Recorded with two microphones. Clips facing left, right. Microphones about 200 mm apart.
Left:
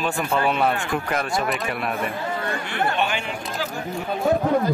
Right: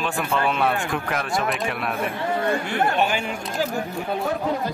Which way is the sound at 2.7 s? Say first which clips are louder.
Right 2 dB; 45° right (ahead or behind).